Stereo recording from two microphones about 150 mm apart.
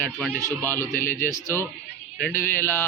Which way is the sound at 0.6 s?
15° left (ahead or behind).